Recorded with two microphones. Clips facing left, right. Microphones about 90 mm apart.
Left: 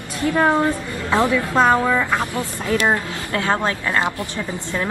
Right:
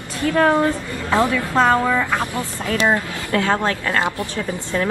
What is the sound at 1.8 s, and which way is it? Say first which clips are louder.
Speech: even; centre (ahead or behind).